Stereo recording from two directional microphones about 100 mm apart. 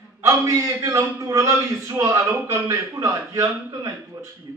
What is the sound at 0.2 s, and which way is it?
A man's voice, 35° right (ahead or behind).